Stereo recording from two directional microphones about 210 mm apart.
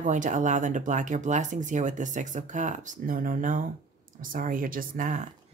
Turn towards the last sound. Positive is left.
turn(degrees=-40)  # may be behind; listen again after turning